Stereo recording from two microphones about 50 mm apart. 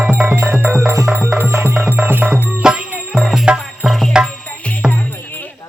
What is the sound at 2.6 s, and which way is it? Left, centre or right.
Music, centre.